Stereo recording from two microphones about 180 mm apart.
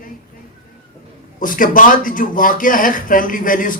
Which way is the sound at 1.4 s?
50° left (ahead or behind).